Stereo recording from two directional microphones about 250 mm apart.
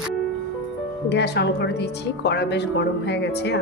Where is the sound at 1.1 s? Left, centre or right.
Left.